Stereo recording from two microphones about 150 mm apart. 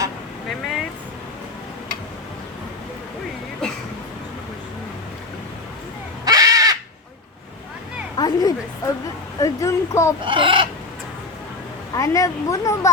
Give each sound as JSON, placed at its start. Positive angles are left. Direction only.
{"t": 6.2, "sound": "crow", "side_deg": -25}
{"t": 8.1, "sound": "a woman's voice", "side_deg": 25}
{"t": 10.2, "sound": "speech", "side_deg": -35}
{"t": 11.9, "sound": "speech", "side_deg": 20}